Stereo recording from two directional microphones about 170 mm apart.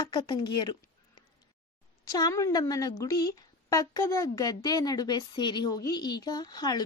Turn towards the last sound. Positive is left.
turn(degrees=25)  # may be behind; listen again after turning